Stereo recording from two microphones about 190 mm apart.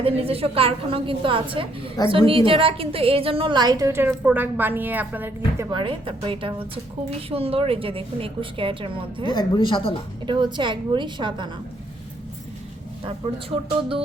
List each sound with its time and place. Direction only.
0.0 s a woman's voice: 30° right (ahead or behind); by 5.6 s 10° right (ahead or behind)
5.7 s a woman's voice: 25° right (ahead or behind)
9.3 s speech: 20° left (ahead or behind)
10.2 s a woman's voice: 25° right (ahead or behind)